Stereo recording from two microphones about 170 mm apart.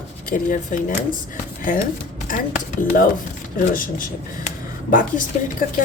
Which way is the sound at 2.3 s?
55° left (ahead or behind).